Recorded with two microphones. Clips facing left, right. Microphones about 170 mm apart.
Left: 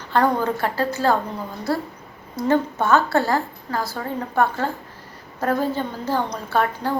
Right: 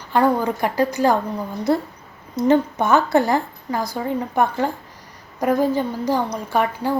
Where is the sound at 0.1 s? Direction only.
10° right (ahead or behind).